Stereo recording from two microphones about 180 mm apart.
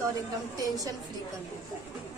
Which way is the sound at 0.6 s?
20° right (ahead or behind).